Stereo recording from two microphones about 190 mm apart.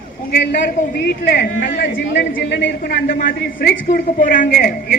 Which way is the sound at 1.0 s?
55° left (ahead or behind).